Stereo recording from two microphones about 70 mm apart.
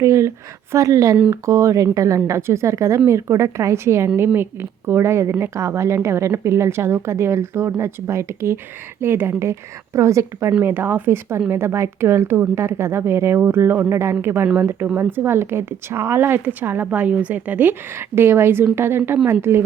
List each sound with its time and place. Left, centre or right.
0.0 s a woman's voice: right
10.6 s a woman's voice: right
14.4 s a woman's voice: right